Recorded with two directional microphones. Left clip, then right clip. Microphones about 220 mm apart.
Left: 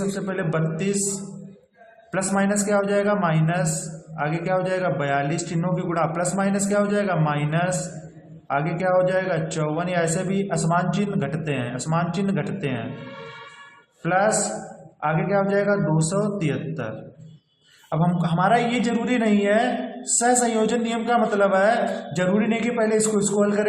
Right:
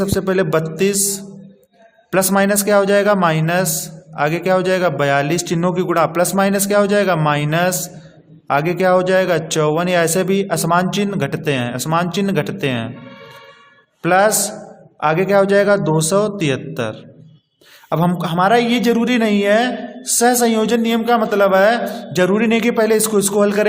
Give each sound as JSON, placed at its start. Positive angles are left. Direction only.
{"t": 0.2, "sound": "a man's voice", "side_deg": -50}
{"t": 2.0, "sound": "a man's voice", "side_deg": -45}
{"t": 14.0, "sound": "a man's voice", "side_deg": -50}